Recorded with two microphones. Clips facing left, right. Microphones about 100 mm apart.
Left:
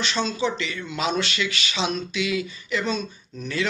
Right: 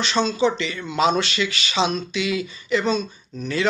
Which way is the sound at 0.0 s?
25° right (ahead or behind).